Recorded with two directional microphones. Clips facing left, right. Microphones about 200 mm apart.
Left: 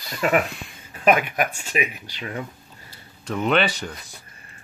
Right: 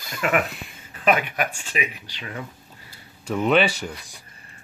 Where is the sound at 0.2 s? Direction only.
35° left (ahead or behind).